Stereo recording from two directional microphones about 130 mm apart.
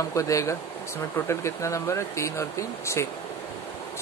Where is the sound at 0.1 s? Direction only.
25° left (ahead or behind).